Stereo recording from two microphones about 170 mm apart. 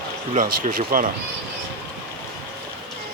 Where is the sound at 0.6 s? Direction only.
55° right (ahead or behind).